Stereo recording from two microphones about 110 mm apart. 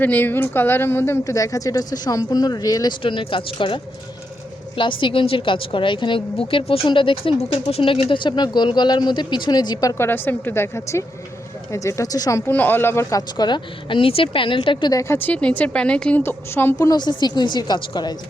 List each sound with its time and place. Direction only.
0.0 s a woman's voice: 15° left (ahead or behind); by 2.9 s 35° left (ahead or behind)
3.0 s a woman's voice: 50° left (ahead or behind)
4.8 s a woman's voice: 50° left (ahead or behind)
7.3 s a woman's voice: 60° left (ahead or behind); by 9.9 s 35° left (ahead or behind)
10.0 s a woman's voice: 20° left (ahead or behind); by 12.4 s 35° left (ahead or behind)
12.5 s speech: 15° left (ahead or behind); by 14.9 s 45° left (ahead or behind)
14.9 s a woman's voice: 25° left (ahead or behind)
16.7 s speech: 35° left (ahead or behind)